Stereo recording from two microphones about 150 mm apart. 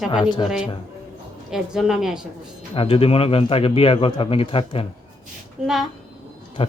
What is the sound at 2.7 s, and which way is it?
A man's voice, 40° left (ahead or behind).